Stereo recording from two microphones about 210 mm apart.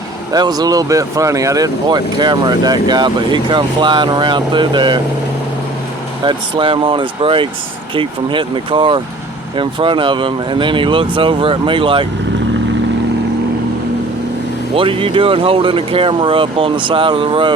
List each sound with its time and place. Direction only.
0.3 s speech: 20° right (ahead or behind)
6.2 s speech: 25° right (ahead or behind)
14.8 s speech: 25° right (ahead or behind)